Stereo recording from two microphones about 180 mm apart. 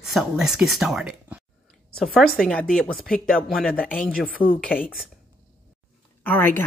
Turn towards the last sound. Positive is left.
turn(degrees=10)  # may be behind; listen again after turning